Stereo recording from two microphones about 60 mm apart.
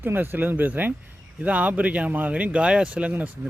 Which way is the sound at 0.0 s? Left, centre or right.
Right.